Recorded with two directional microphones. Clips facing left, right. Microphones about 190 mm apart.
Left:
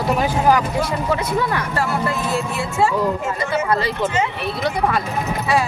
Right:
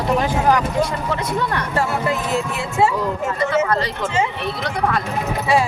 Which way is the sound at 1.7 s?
20° right (ahead or behind).